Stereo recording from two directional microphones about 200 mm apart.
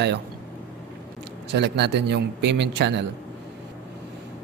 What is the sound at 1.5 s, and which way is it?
Speech, 60° right (ahead or behind).